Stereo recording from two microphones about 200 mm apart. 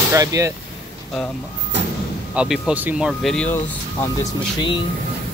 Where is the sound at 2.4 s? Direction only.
5° right (ahead or behind).